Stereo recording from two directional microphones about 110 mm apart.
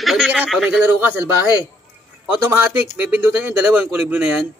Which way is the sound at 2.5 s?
15° right (ahead or behind).